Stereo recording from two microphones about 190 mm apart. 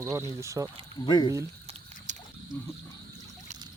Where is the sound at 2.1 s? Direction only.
40° right (ahead or behind).